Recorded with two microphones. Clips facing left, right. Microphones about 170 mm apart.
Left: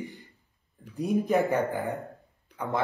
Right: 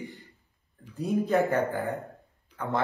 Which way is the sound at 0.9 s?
15° left (ahead or behind).